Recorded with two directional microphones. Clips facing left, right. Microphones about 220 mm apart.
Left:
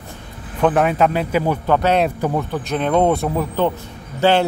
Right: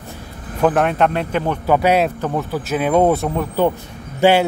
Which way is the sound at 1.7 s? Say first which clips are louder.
Right 2 dB; 10° right (ahead or behind).